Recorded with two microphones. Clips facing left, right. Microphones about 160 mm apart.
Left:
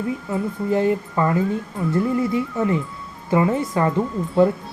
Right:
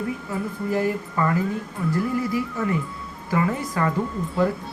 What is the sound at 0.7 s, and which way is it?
A woman's voice, 25° left (ahead or behind).